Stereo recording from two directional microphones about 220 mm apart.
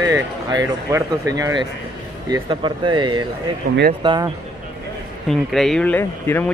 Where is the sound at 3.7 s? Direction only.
45° right (ahead or behind).